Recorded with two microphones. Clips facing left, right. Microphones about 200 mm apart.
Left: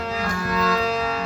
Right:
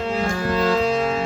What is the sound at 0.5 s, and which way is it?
Music, 30° right (ahead or behind).